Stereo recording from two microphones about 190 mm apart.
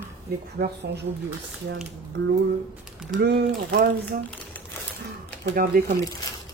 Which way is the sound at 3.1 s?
65° right (ahead or behind).